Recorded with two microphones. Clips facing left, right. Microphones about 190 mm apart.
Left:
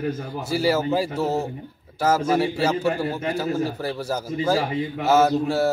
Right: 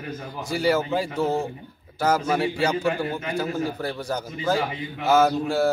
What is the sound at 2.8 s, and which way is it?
Speech, 30° left (ahead or behind).